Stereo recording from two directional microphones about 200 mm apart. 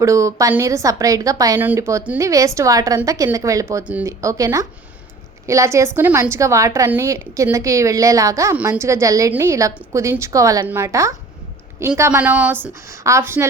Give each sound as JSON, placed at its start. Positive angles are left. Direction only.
{"t": 0.0, "sound": "a woman's voice", "side_deg": -15}